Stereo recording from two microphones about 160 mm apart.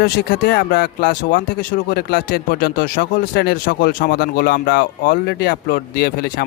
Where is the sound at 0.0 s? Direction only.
75° left (ahead or behind).